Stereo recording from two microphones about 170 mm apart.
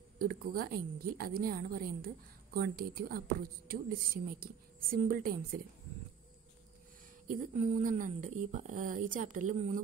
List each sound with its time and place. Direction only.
0.2 s a woman's voice: 60° right (ahead or behind)
7.2 s speech: 40° right (ahead or behind)